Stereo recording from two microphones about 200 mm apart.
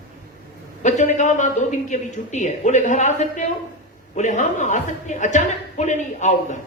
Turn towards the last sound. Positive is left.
turn(degrees=35)  # may be behind; listen again after turning